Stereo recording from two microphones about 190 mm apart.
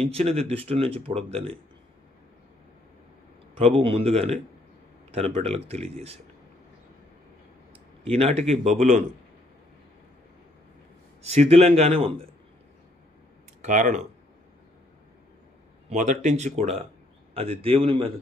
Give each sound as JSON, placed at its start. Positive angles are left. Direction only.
{"t": 0.1, "sound": "speech", "side_deg": -30}
{"t": 3.5, "sound": "speech", "side_deg": -30}
{"t": 8.0, "sound": "speech", "side_deg": -30}
{"t": 11.2, "sound": "speech", "side_deg": -35}
{"t": 13.6, "sound": "speech", "side_deg": -40}
{"t": 15.9, "sound": "speech", "side_deg": -40}